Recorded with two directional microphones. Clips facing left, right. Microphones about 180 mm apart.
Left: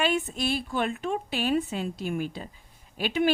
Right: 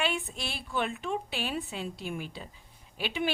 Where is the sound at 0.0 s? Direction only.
40° left (ahead or behind).